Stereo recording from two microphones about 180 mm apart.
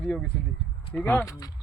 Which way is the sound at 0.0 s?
5° left (ahead or behind).